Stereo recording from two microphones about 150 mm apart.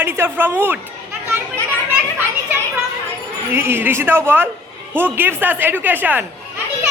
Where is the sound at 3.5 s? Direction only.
15° right (ahead or behind).